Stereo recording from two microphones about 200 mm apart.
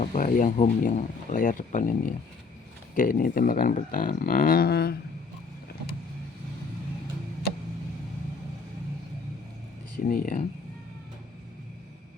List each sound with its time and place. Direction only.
0.0 s speech: 40° left (ahead or behind)
10.0 s speech: 45° left (ahead or behind)